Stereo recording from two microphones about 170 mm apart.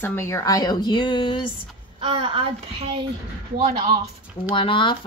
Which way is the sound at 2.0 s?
35° right (ahead or behind).